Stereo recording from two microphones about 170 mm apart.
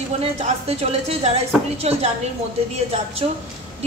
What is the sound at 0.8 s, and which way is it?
A woman's voice, 35° right (ahead or behind).